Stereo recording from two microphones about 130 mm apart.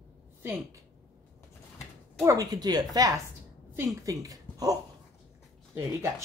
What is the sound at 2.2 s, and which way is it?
Speech, 30° right (ahead or behind).